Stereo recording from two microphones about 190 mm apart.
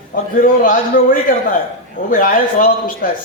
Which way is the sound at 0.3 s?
45° left (ahead or behind).